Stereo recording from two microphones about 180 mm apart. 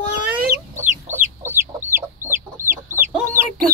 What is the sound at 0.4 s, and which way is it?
Chicken, 50° right (ahead or behind).